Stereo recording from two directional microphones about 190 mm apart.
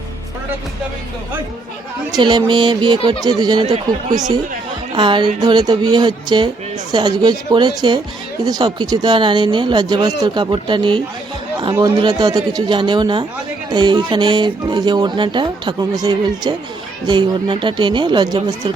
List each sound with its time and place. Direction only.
2.1 s speech: 25° right (ahead or behind)